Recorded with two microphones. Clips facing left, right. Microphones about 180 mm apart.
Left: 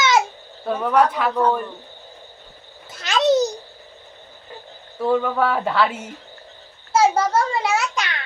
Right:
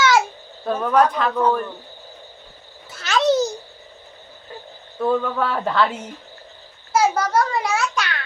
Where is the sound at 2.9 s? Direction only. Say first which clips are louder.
Even; 20° left (ahead or behind).